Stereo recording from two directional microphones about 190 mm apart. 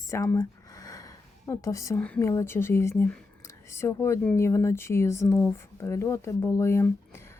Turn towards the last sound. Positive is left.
turn(degrees=15)  # may be behind; listen again after turning